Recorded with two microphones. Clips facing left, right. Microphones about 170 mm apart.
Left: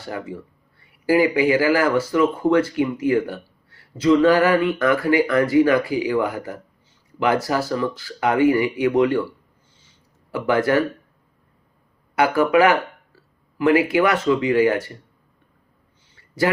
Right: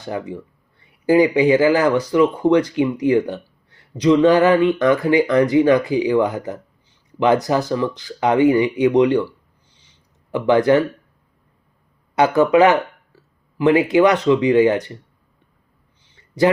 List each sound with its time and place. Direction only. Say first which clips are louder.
0.0 s speech: right 3 dB; 20° right (ahead or behind)
10.3 s speech: right 4 dB; 20° right (ahead or behind)
12.1 s speech: right 3 dB; 20° right (ahead or behind)
16.1 s a sound: right 5 dB; 20° right (ahead or behind)